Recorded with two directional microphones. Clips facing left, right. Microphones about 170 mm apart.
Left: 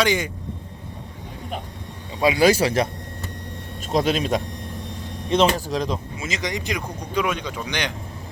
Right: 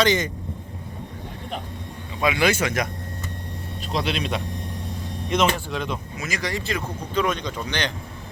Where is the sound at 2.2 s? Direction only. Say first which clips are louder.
Left 4 dB; 35° left (ahead or behind); by 7.9 s 10° left (ahead or behind).